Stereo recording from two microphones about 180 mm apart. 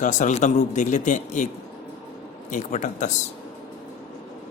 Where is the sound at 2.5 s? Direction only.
40° left (ahead or behind).